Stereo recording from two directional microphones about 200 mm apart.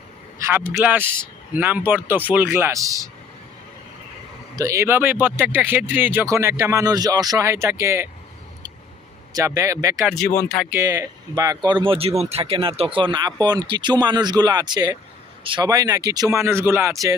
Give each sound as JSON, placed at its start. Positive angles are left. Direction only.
{"t": 0.4, "sound": "speech", "side_deg": -10}
{"t": 4.5, "sound": "speech", "side_deg": -15}
{"t": 9.3, "sound": "speech", "side_deg": -15}
{"t": 10.1, "sound": "speech", "side_deg": 5}
{"t": 10.7, "sound": "speech", "side_deg": -15}